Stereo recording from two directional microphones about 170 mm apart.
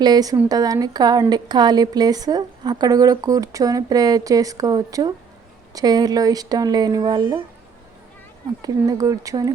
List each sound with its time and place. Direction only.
0.0 s speech: 20° right (ahead or behind)
8.6 s speech: 20° right (ahead or behind)